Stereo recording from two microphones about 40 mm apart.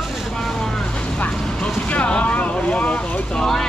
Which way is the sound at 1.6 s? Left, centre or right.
Left.